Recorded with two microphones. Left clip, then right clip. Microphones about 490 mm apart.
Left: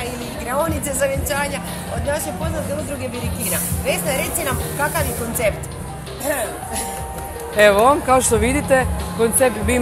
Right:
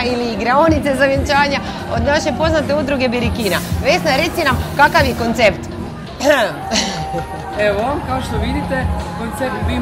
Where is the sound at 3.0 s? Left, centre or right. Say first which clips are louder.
Right 10 dB; right.